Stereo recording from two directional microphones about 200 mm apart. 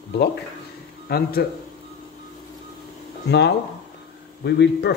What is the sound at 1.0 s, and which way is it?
Speech, 50° left (ahead or behind).